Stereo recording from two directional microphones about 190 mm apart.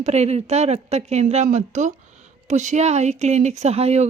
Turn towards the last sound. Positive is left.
turn(degrees=-35)  # may be behind; listen again after turning